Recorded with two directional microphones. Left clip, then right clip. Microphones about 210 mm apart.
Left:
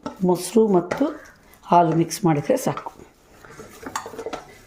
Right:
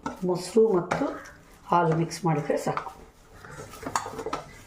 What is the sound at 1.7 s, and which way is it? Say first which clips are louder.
Speech: left 7 dB; 50° left (ahead or behind).